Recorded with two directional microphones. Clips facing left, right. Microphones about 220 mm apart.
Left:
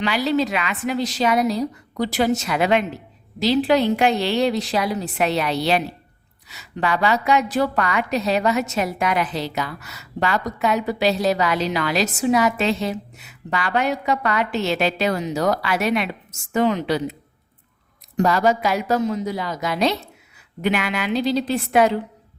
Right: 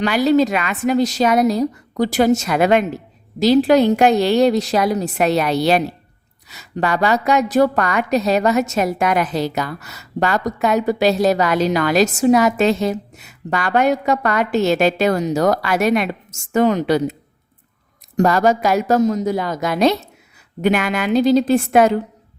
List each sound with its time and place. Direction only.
0.0 s a woman's voice: 45° right (ahead or behind)
18.2 s a woman's voice: 45° right (ahead or behind)